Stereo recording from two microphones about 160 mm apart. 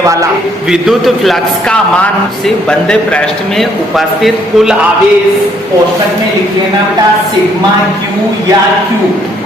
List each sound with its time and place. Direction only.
0.0 s a man's voice: 20° right (ahead or behind)
0.7 s a man's voice: centre (ahead or behind)